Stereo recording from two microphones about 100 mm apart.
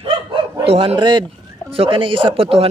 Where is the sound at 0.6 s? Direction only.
75° right (ahead or behind).